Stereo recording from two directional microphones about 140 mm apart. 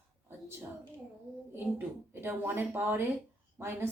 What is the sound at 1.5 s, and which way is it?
Speech, 15° right (ahead or behind).